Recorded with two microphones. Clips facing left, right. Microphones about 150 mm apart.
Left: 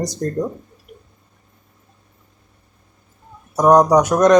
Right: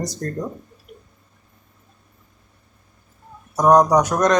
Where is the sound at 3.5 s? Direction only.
10° left (ahead or behind).